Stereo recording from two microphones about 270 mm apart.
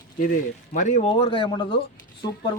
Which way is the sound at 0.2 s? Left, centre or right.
Left.